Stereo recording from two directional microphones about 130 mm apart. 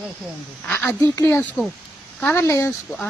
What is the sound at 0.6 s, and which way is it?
Speech, 10° left (ahead or behind).